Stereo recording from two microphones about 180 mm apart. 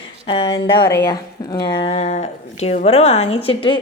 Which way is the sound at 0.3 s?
25° left (ahead or behind).